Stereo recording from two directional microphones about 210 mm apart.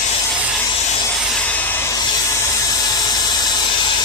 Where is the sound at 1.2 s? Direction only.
Centre (ahead or behind).